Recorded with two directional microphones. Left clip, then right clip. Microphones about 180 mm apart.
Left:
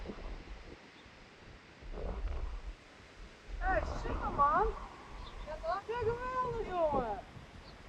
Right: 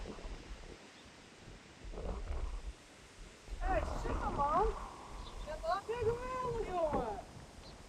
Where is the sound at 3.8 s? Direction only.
Centre (ahead or behind).